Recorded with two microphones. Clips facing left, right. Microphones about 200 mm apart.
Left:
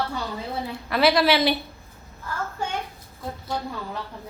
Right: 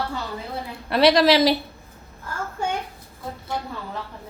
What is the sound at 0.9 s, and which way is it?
Speech, 35° right (ahead or behind).